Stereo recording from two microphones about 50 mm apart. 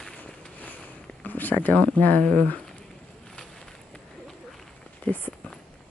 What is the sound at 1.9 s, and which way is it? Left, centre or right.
Speech, left.